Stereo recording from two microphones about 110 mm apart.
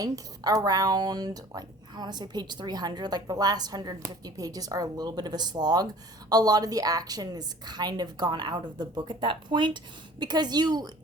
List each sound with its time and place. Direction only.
0.0 s speech: 35° right (ahead or behind)